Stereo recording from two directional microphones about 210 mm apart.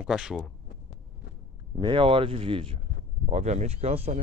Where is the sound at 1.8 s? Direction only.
25° right (ahead or behind).